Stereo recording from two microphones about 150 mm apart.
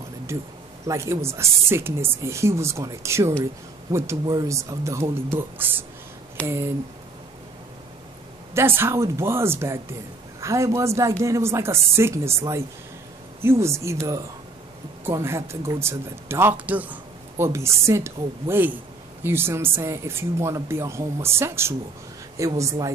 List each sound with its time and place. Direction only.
0.8 s speech: 20° right (ahead or behind)
8.5 s speech: 15° right (ahead or behind)
15.0 s speech: 15° right (ahead or behind)